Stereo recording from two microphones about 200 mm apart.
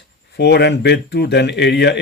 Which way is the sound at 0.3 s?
55° left (ahead or behind).